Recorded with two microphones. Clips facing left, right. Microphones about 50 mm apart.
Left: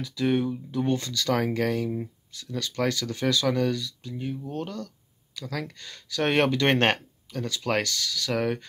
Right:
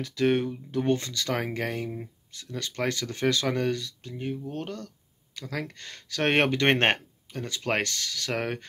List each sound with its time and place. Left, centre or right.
0.0 s speech: right
4.5 s a sound: right
5.5 s speech: right
5.8 s speech: right